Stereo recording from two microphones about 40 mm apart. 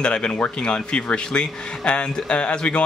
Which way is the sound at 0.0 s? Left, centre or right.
Left.